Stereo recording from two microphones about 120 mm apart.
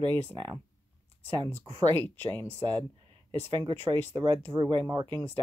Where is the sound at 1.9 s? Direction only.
15° left (ahead or behind).